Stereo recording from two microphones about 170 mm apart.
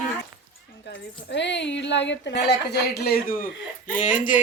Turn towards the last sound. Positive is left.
turn(degrees=50)  # may be behind; listen again after turning